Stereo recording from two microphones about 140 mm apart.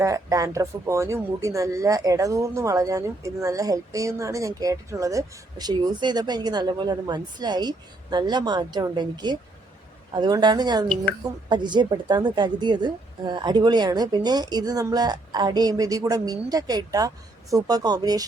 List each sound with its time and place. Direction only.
0.0 s speech: 25° right (ahead or behind)